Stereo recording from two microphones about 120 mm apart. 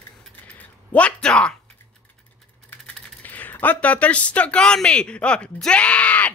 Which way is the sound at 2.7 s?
15° left (ahead or behind).